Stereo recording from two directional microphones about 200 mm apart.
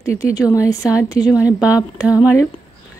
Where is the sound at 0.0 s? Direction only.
15° left (ahead or behind).